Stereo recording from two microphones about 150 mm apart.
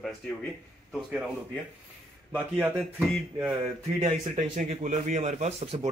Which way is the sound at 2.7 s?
5° left (ahead or behind).